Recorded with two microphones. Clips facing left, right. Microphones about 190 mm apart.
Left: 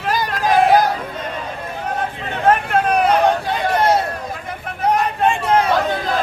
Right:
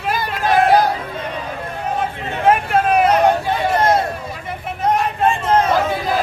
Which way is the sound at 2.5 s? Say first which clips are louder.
Right 1 dB; 5° right (ahead or behind).